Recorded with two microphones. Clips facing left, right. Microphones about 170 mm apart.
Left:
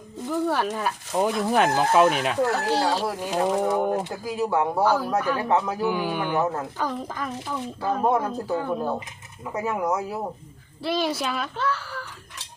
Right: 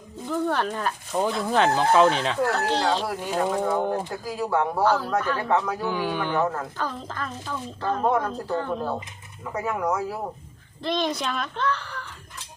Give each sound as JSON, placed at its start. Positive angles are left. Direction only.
{"t": 0.3, "sound": "speech", "side_deg": 10}
{"t": 4.4, "sound": "a man's voice", "side_deg": 20}
{"t": 4.8, "sound": "speech", "side_deg": 10}
{"t": 5.9, "sound": "speech", "side_deg": 15}
{"t": 9.8, "sound": "a man's voice", "side_deg": 20}
{"t": 10.8, "sound": "a child's voice", "side_deg": 5}